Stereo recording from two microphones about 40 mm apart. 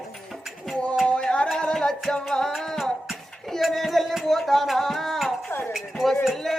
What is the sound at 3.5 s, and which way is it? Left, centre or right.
Speech, centre.